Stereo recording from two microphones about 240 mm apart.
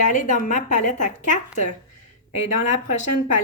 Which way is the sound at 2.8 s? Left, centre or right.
Left.